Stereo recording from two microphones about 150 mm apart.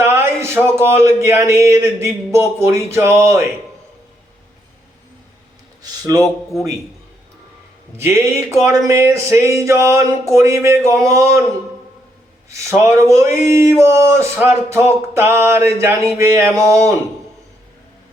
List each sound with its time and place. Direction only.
0.0 s speech: 15° right (ahead or behind)
5.8 s a man's voice: 25° right (ahead or behind)
7.9 s speech: 20° right (ahead or behind)
12.5 s speech: 20° right (ahead or behind)
13.5 s music: 20° right (ahead or behind)
16.6 s speech: 20° right (ahead or behind)